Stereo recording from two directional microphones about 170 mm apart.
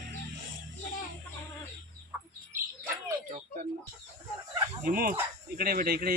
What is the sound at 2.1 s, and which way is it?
Bird, 10° right (ahead or behind).